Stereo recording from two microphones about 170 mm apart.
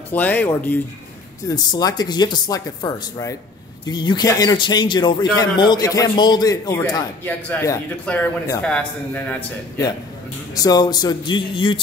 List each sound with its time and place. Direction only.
0.1 s speech: 10° left (ahead or behind)
1.5 s a man's voice: 20° left (ahead or behind)
10.5 s a man's voice: 20° left (ahead or behind)